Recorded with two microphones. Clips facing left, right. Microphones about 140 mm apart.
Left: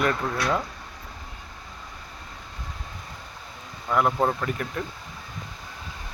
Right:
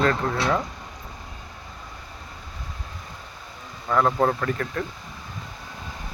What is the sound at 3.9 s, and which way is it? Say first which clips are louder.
Speech: right 2 dB; 10° left (ahead or behind).